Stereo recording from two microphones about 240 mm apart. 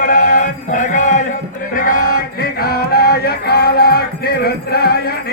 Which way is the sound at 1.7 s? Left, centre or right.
Left.